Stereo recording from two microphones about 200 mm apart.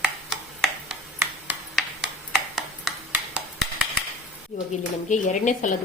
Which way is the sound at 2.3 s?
Centre (ahead or behind).